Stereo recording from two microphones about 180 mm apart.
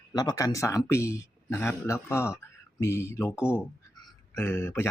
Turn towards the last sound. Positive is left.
turn(degrees=15)  # may be behind; listen again after turning